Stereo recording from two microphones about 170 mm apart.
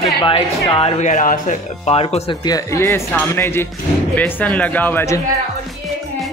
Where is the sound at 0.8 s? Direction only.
45° left (ahead or behind).